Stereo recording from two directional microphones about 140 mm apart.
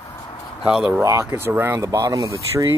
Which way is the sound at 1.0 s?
20° right (ahead or behind).